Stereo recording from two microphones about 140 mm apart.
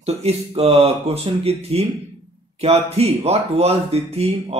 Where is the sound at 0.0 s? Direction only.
45° right (ahead or behind).